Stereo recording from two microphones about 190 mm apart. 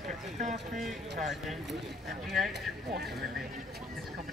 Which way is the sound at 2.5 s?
55° right (ahead or behind).